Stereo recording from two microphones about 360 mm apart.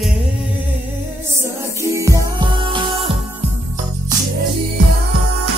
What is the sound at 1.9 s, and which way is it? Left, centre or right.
Music, centre.